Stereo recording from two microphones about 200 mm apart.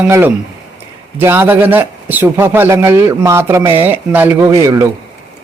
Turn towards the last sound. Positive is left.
turn(degrees=-15)  # may be behind; listen again after turning